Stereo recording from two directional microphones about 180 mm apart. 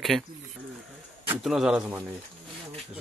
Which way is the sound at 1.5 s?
Centre (ahead or behind).